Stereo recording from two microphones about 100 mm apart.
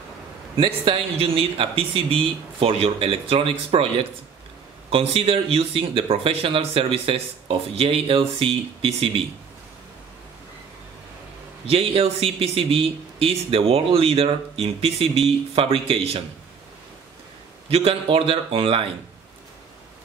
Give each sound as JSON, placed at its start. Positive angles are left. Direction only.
{"t": 0.6, "sound": "speech", "side_deg": -65}
{"t": 11.7, "sound": "speech", "side_deg": -75}
{"t": 17.6, "sound": "speech", "side_deg": -75}